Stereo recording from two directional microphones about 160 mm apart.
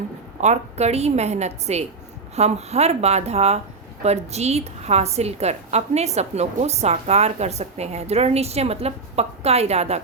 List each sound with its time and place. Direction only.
0.4 s a woman's voice: 45° right (ahead or behind)